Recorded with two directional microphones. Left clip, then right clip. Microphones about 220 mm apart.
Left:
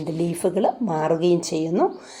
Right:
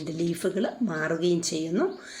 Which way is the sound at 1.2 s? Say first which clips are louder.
Left 5 dB; 25° left (ahead or behind).